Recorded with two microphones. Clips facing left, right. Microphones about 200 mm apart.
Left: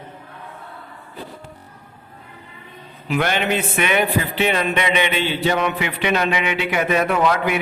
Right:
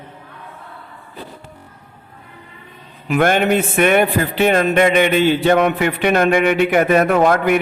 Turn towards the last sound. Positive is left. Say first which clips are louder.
# right 5 dB
turn(degrees=-50)  # may be behind; listen again after turning